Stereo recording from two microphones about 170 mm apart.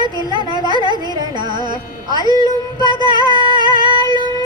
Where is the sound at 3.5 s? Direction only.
25° right (ahead or behind).